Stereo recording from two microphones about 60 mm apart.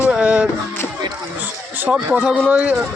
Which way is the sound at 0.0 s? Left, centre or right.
Centre.